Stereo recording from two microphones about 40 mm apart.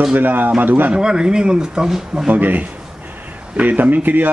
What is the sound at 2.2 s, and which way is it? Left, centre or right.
Speech, right.